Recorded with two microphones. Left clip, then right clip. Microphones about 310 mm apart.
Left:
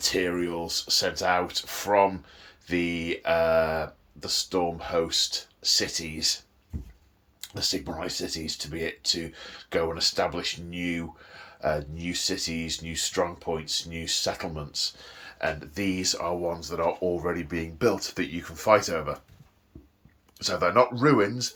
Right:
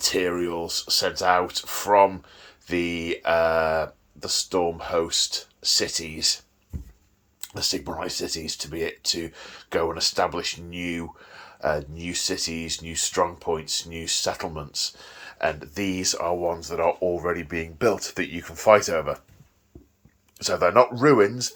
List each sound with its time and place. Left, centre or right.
0.0 s speech: centre
7.4 s speech: centre
20.4 s speech: centre